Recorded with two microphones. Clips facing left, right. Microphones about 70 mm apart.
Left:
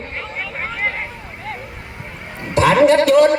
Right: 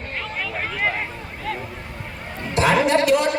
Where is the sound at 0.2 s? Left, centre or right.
Left.